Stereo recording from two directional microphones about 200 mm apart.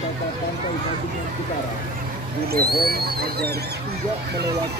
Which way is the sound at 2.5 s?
50° right (ahead or behind).